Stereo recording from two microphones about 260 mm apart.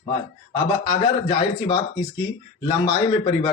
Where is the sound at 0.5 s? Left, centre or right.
Centre.